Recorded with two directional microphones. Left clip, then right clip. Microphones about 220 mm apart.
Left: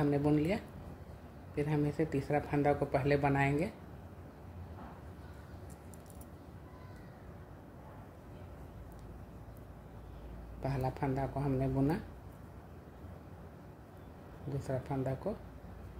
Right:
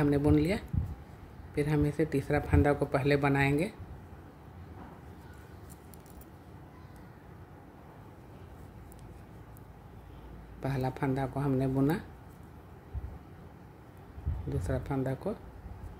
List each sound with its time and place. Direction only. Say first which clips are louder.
0.0 s speech: right 4 dB; 20° right (ahead or behind)
10.6 s speech: right 3 dB; 20° right (ahead or behind)
14.6 s speech: right 3 dB; 20° right (ahead or behind)